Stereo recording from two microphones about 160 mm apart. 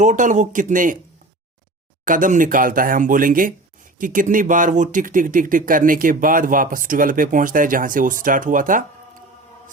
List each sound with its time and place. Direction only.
0.0 s speech: 50° right (ahead or behind)
2.0 s speech: 55° right (ahead or behind)